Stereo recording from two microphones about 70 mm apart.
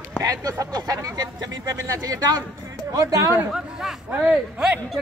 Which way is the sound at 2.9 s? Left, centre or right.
Right.